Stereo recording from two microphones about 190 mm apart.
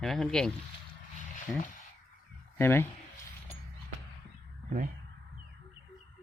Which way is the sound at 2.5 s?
10° left (ahead or behind).